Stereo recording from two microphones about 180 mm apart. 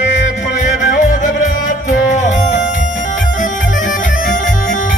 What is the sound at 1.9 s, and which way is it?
Music, 45° left (ahead or behind).